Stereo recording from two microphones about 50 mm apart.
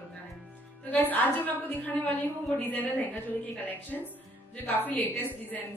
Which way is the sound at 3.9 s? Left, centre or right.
Left.